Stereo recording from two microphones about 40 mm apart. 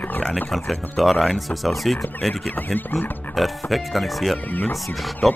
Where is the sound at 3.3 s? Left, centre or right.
Centre.